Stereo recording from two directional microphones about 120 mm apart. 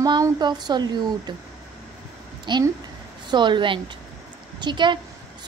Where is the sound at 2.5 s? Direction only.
40° right (ahead or behind).